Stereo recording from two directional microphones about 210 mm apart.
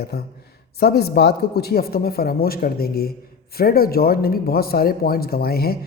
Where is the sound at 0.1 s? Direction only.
50° left (ahead or behind).